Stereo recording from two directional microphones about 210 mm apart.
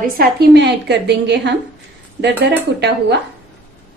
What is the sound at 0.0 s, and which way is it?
A woman's voice, 50° right (ahead or behind).